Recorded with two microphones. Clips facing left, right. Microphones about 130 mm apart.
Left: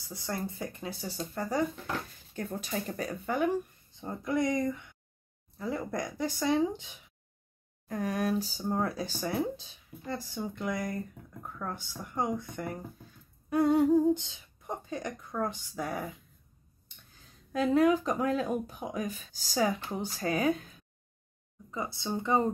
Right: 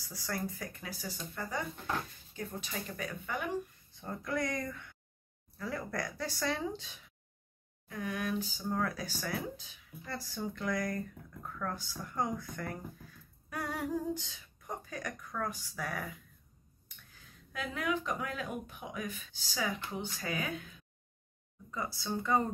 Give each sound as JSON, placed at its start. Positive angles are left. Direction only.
{"t": 0.0, "sound": "speech", "side_deg": 25}
{"t": 2.3, "sound": "speech", "side_deg": 40}
{"t": 3.9, "sound": "speech", "side_deg": 20}
{"t": 7.9, "sound": "speech", "side_deg": 40}
{"t": 21.6, "sound": "speech", "side_deg": 20}